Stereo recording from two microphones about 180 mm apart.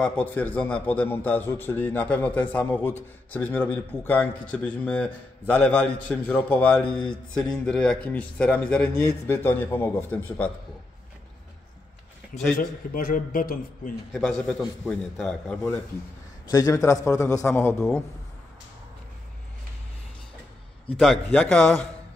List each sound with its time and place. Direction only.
0.0 s a man's voice: 10° left (ahead or behind)
12.5 s a man's voice: 50° left (ahead or behind)
14.2 s speech: centre (ahead or behind)
16.4 s a man's voice: 20° left (ahead or behind)
21.0 s speech: 5° left (ahead or behind)